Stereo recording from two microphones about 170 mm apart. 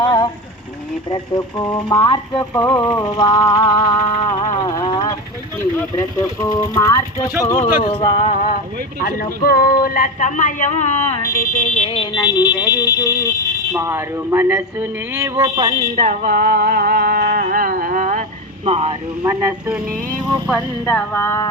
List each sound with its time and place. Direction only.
0.0 s a sound: 30° left (ahead or behind)
1.1 s music: 25° left (ahead or behind)
2.6 s speech: 10° left (ahead or behind)
2.8 s music: 25° left (ahead or behind)
6.1 s music: 20° left (ahead or behind)
7.9 s a sound: 30° left (ahead or behind)
8.2 s speech: 50° left (ahead or behind)
12.2 s music: 25° left (ahead or behind)
13.7 s speech: 15° right (ahead or behind)
15.4 s speech: 25° right (ahead or behind)
16.0 s a sound: 50° right (ahead or behind)
18.6 s speech: 35° right (ahead or behind)
19.2 s speech: 20° right (ahead or behind)
20.5 s speech: 10° left (ahead or behind)